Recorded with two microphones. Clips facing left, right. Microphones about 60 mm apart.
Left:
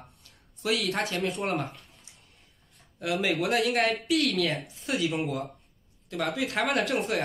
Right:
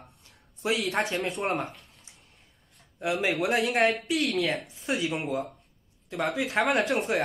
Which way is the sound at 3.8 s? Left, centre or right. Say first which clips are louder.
Right 1 dB; centre.